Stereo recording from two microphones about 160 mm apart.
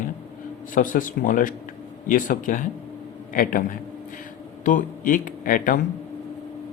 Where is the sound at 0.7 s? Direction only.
55° left (ahead or behind).